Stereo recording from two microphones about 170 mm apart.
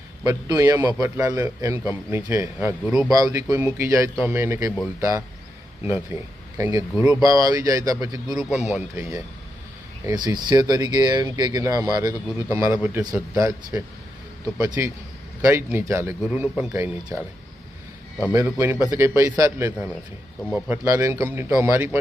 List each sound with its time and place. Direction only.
0.3 s a man's voice: 20° right (ahead or behind)
2.8 s speech: 5° right (ahead or behind)
3.1 s a man's voice: 20° right (ahead or behind)
7.2 s a man's voice: 20° right (ahead or behind)